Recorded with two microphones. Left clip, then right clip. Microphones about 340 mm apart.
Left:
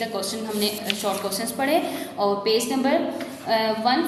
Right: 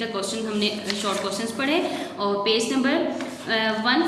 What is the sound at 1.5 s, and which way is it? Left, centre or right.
A woman's voice, centre.